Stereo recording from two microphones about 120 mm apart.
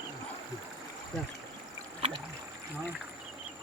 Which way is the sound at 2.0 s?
55° right (ahead or behind).